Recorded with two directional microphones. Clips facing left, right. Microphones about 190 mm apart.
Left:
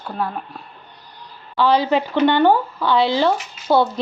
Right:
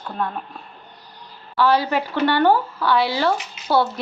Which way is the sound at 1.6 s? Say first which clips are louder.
Left 2 dB; 20° left (ahead or behind).